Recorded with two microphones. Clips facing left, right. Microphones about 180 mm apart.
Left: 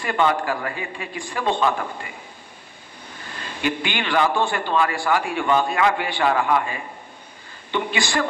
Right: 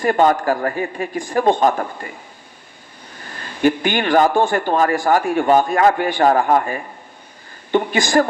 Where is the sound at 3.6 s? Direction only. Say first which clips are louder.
Right 8 dB; 40° right (ahead or behind).